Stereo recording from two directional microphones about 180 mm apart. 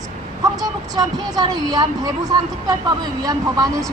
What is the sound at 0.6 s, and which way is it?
Speech, 20° right (ahead or behind).